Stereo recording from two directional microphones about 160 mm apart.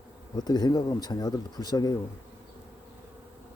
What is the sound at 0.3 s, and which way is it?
Speech, 25° left (ahead or behind).